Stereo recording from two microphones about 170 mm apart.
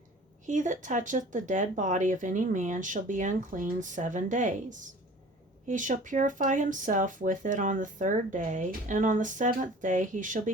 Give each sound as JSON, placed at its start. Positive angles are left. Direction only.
{"t": 0.4, "sound": "speech", "side_deg": -45}